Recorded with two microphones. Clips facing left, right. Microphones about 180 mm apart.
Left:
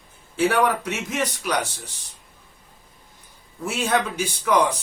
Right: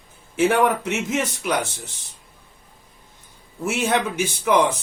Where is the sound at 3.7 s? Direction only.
20° right (ahead or behind).